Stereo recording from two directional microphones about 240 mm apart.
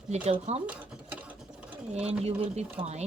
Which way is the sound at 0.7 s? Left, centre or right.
Centre.